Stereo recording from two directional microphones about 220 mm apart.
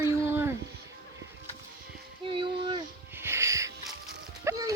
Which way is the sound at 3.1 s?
10° right (ahead or behind).